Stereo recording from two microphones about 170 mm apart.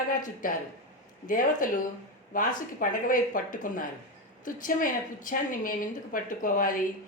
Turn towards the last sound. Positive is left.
turn(degrees=55)  # may be behind; listen again after turning